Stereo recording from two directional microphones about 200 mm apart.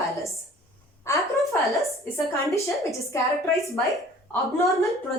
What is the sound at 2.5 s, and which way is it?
Speech, 15° left (ahead or behind).